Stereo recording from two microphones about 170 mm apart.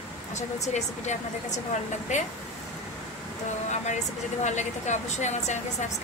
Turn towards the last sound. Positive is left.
turn(degrees=45)  # may be behind; listen again after turning